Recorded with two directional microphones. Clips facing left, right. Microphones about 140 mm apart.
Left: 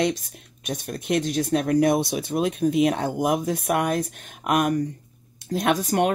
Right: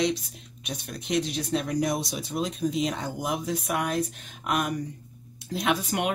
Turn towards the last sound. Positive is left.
turn(degrees=45)  # may be behind; listen again after turning